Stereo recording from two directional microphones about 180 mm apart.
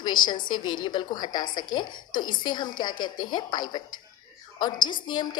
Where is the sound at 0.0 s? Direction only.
25° left (ahead or behind).